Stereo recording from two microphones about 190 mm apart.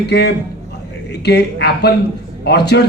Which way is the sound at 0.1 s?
60° left (ahead or behind).